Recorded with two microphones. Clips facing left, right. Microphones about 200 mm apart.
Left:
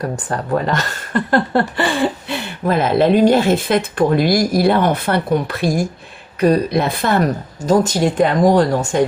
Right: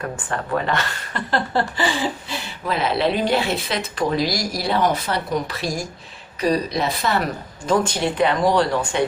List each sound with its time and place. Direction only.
0.0 s speech: 40° left (ahead or behind)